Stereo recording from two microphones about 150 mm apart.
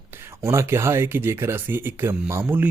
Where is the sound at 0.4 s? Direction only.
20° right (ahead or behind).